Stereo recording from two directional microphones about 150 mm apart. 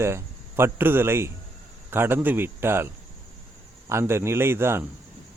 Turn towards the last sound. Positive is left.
turn(degrees=-15)  # may be behind; listen again after turning